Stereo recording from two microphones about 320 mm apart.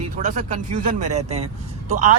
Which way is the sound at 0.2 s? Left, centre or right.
Right.